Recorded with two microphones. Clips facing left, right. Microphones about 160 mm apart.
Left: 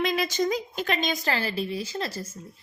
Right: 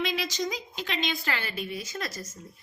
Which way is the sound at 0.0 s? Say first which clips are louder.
Left 5 dB; 50° left (ahead or behind).